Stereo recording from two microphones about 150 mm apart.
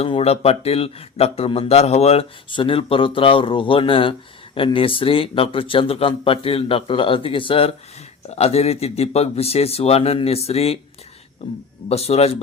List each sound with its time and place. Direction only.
0.0 s a man's voice: 40° left (ahead or behind)
11.9 s speech: 45° left (ahead or behind)